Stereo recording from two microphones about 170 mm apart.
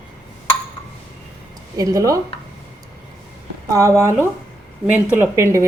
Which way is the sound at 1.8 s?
20° right (ahead or behind).